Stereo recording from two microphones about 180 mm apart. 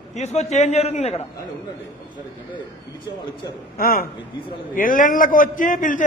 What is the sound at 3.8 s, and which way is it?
A man's voice, 55° left (ahead or behind).